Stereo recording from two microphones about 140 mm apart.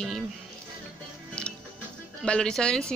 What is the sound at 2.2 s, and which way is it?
Speech, 5° left (ahead or behind).